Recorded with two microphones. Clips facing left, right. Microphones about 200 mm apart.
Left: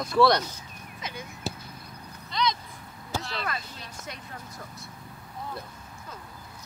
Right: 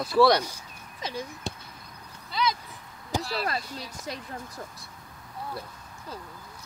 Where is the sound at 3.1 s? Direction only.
15° right (ahead or behind).